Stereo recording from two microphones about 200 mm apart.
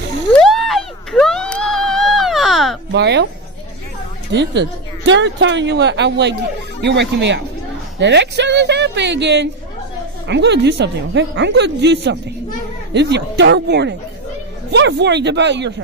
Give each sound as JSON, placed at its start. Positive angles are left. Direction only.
{"t": 0.4, "sound": "a sound", "side_deg": 0}
{"t": 2.9, "sound": "speech", "side_deg": -60}
{"t": 4.3, "sound": "a woman's voice", "side_deg": -60}